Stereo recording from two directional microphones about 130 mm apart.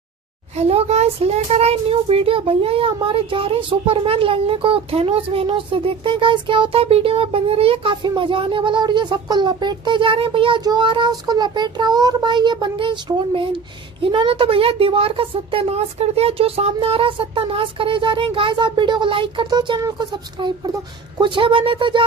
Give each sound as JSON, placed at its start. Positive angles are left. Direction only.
{"t": 0.6, "sound": "speech", "side_deg": -55}
{"t": 10.6, "sound": "child singing", "side_deg": -35}
{"t": 14.0, "sound": "speech", "side_deg": -40}
{"t": 21.2, "sound": "child singing", "side_deg": -40}